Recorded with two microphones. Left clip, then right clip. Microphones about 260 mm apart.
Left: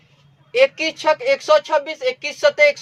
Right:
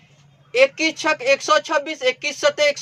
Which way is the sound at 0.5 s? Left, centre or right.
Centre.